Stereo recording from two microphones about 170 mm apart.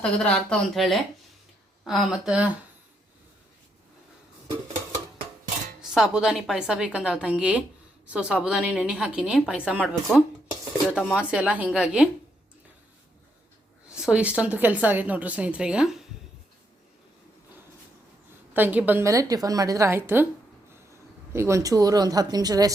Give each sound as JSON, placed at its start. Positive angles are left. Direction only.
{"t": 0.0, "sound": "a woman's voice", "side_deg": 5}
{"t": 5.8, "sound": "a woman's voice", "side_deg": -5}
{"t": 13.9, "sound": "a woman's voice", "side_deg": -5}
{"t": 18.5, "sound": "a woman's voice", "side_deg": -10}
{"t": 21.3, "sound": "speech", "side_deg": -15}